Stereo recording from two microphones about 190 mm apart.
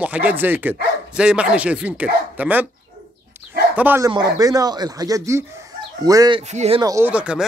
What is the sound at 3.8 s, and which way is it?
Speech, 15° right (ahead or behind).